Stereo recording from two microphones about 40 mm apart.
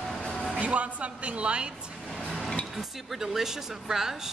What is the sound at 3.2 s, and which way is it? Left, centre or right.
Speech, centre.